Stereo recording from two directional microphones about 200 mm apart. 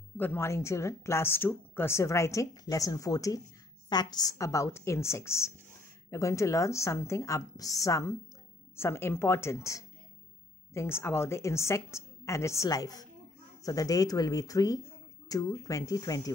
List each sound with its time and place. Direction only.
0.2 s a woman's voice: 10° left (ahead or behind)